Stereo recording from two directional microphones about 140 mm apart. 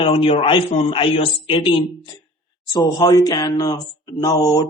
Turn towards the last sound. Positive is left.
turn(degrees=25)  # may be behind; listen again after turning